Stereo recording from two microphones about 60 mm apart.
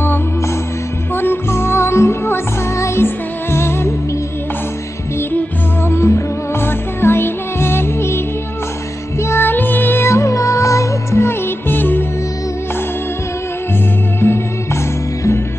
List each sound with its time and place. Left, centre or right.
1.1 s music: left
5.9 s music: left
9.2 s music: left
10.0 s music: left
11.7 s music: left
14.2 s music: left